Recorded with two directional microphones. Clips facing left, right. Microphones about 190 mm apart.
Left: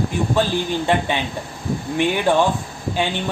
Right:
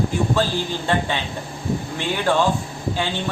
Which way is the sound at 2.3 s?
15° left (ahead or behind).